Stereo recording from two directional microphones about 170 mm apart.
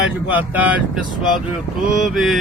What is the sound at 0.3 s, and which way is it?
Speech, 10° right (ahead or behind).